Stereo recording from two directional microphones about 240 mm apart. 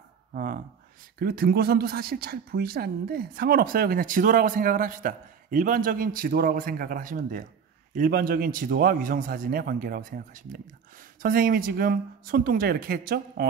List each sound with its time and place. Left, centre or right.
0.3 s a woman's voice: right